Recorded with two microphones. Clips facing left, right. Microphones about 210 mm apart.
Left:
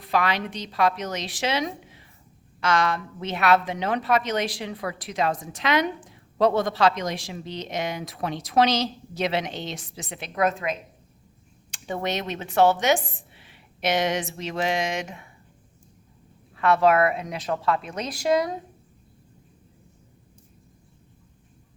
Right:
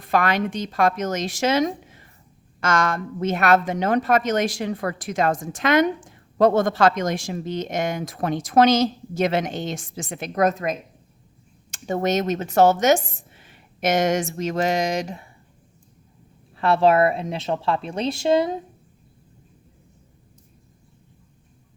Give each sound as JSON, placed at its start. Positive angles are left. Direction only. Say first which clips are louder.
{"t": 0.0, "sound": "a woman's voice", "louder": "right 4 dB", "side_deg": -50}
{"t": 16.6, "sound": "speech", "louder": "right 2 dB", "side_deg": -30}